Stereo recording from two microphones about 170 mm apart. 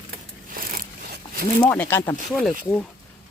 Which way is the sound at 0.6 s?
60° right (ahead or behind).